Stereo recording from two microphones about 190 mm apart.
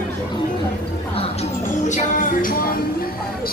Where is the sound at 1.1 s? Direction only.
35° left (ahead or behind).